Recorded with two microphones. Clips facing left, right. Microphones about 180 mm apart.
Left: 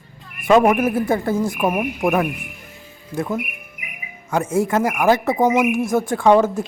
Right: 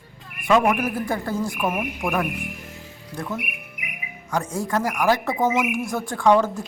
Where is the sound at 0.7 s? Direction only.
20° left (ahead or behind).